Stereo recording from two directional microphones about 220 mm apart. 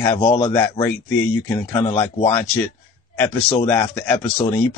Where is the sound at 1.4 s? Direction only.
10° left (ahead or behind).